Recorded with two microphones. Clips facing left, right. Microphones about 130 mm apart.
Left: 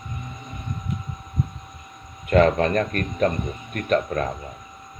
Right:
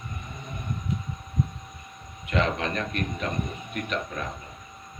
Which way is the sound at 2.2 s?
45° left (ahead or behind).